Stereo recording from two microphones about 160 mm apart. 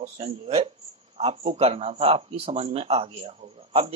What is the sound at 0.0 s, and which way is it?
Speech, 45° right (ahead or behind).